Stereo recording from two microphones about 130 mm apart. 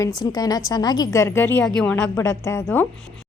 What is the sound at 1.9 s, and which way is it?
Speech, 20° left (ahead or behind).